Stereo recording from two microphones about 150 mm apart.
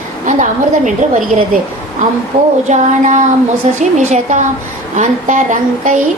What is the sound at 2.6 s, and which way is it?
A woman's voice, 55° right (ahead or behind).